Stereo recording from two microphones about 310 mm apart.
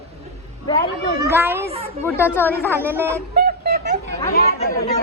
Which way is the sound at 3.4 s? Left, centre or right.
Right.